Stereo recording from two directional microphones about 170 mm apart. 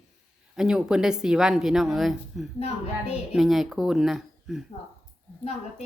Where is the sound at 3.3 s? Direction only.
Centre (ahead or behind).